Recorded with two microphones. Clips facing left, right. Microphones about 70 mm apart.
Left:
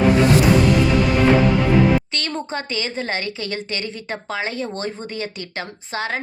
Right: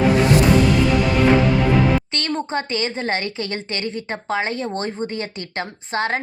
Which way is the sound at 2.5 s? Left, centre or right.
Right.